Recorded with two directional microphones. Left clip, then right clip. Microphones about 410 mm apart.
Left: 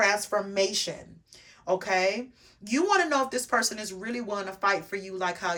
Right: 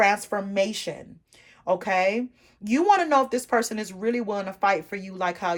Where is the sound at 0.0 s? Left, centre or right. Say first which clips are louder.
Right 3 dB; centre.